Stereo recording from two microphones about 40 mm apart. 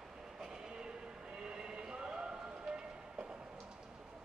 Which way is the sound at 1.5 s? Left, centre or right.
Centre.